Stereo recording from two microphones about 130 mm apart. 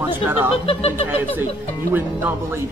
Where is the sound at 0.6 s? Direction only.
45° left (ahead or behind).